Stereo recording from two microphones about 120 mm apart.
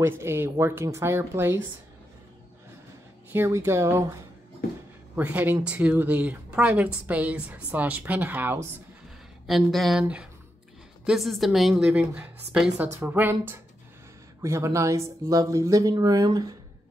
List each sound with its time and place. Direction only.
0.0 s speech: 20° right (ahead or behind)
3.3 s speech: 25° right (ahead or behind)
5.1 s speech: 15° right (ahead or behind)
9.5 s a woman's voice: centre (ahead or behind)
11.1 s a woman's voice: centre (ahead or behind); by 16.5 s 35° right (ahead or behind)